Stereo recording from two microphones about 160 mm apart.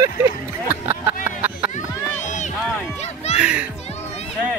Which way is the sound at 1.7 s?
50° left (ahead or behind).